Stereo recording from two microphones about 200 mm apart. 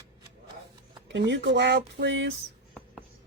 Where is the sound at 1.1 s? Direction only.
60° right (ahead or behind).